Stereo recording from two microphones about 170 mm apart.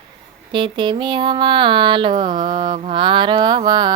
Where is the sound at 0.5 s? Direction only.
30° right (ahead or behind).